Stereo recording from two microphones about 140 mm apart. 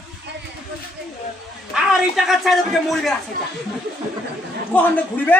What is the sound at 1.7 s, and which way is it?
A man's voice, 5° right (ahead or behind).